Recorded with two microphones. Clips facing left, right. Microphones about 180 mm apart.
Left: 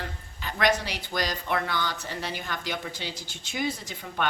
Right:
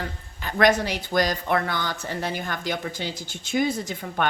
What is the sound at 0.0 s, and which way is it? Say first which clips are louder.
Speech: right 4 dB; 50° right (ahead or behind).